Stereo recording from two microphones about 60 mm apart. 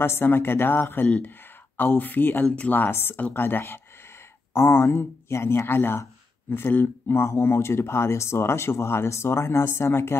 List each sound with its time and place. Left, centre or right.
0.0 s speech: left
2.4 s speech: left
2.7 s speech: left